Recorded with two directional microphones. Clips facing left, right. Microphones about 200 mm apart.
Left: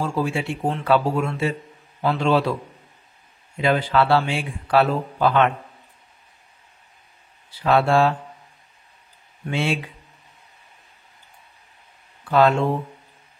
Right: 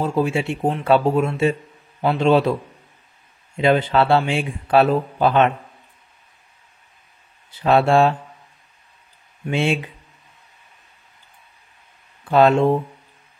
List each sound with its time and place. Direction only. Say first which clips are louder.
0.0 s speech: right 4 dB; 20° right (ahead or behind)
3.5 s speech: right 3 dB; 25° right (ahead or behind)
7.5 s speech: right 3 dB; 25° right (ahead or behind)
9.5 s speech: right 3 dB; 20° right (ahead or behind)
12.3 s speech: right 3 dB; 25° right (ahead or behind)